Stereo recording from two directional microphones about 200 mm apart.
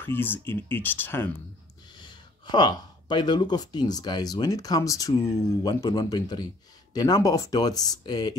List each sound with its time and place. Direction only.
0.0 s speech: 10° left (ahead or behind)
2.0 s speech: 20° left (ahead or behind)